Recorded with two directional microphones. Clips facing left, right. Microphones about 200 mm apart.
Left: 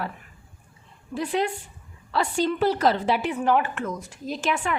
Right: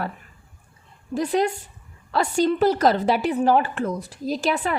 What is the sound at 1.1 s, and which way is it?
A woman's voice, 40° right (ahead or behind).